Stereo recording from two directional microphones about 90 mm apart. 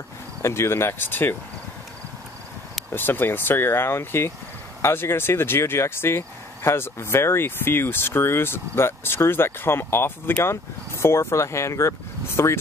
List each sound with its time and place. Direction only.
0.4 s speech: 30° left (ahead or behind)
2.9 s speech: 25° left (ahead or behind)